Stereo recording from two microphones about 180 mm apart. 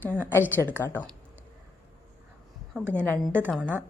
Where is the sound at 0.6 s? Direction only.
15° left (ahead or behind).